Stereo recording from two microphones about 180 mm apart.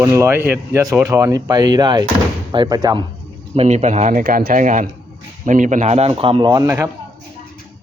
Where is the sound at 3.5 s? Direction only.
40° right (ahead or behind); by 6.9 s 15° right (ahead or behind).